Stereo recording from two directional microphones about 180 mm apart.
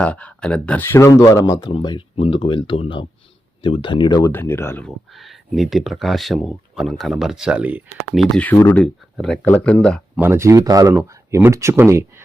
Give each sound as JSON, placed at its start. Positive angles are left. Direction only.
{"t": 0.0, "sound": "speech", "side_deg": 5}
{"t": 4.3, "sound": "speech", "side_deg": 10}
{"t": 10.2, "sound": "speech", "side_deg": -15}